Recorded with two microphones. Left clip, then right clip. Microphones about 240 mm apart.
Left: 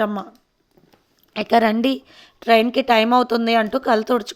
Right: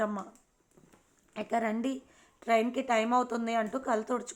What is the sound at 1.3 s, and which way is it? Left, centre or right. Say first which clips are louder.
A woman's voice: left 15 dB; left.